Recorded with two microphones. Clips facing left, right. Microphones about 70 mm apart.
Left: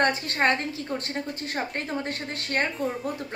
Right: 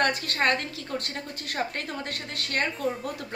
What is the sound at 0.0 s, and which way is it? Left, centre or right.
A child's voice, left.